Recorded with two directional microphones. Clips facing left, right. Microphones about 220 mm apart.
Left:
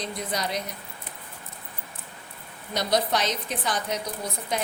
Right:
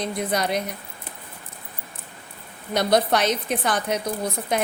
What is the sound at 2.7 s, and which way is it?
A woman's voice, 55° right (ahead or behind).